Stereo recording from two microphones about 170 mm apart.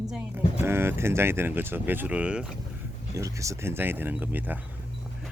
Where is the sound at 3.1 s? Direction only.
20° right (ahead or behind).